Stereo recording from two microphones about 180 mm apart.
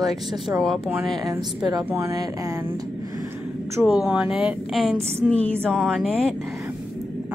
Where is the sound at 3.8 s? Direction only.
5° right (ahead or behind).